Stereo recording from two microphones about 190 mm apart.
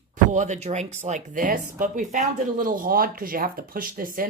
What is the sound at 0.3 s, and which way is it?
Speech, 40° right (ahead or behind).